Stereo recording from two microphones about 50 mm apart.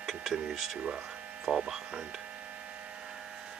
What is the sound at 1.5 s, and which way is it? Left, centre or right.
Speech, centre.